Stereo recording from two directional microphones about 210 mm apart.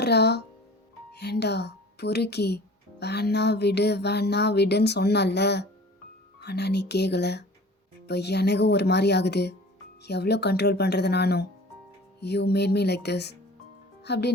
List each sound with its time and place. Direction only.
0.0 s speech: 50° left (ahead or behind)
3.0 s music: 50° left (ahead or behind)
14.0 s speech: 50° left (ahead or behind)